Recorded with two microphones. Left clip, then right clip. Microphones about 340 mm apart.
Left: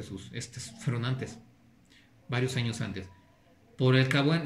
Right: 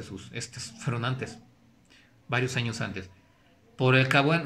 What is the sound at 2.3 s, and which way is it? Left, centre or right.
Speech, centre.